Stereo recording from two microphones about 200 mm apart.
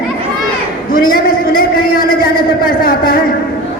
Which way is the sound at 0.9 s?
45° left (ahead or behind).